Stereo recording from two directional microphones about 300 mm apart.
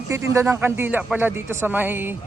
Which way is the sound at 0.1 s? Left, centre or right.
Centre.